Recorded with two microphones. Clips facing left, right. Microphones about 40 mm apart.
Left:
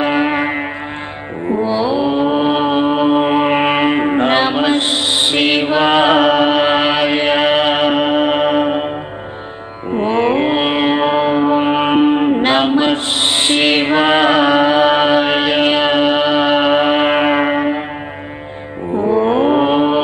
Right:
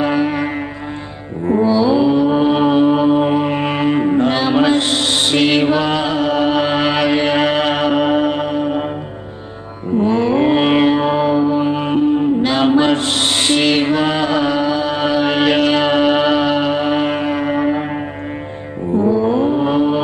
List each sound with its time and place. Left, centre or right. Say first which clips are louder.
0.0 s music: left 2 dB; left
1.5 s mantra: right 3 dB; left
3.1 s mantra: left 2 dB; left
4.5 s mantra: right 1 dB; left
5.8 s mantra: left 6 dB; left
9.9 s music: even; left
10.5 s music: right 2 dB; left
10.9 s mantra: left 1 dB; left
12.0 s music: left 2 dB; left
12.4 s mantra: even; left
15.6 s music: left 1 dB; left
19.0 s mantra: left 3 dB; left